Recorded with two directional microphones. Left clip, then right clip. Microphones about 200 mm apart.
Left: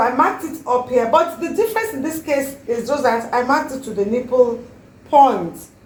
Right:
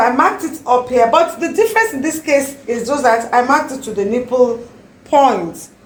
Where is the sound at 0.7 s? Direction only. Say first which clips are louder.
Right 4 dB; 30° right (ahead or behind).